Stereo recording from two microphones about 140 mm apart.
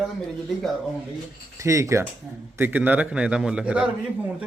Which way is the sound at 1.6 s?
20° right (ahead or behind).